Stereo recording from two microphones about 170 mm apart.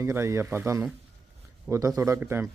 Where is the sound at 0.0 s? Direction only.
15° right (ahead or behind).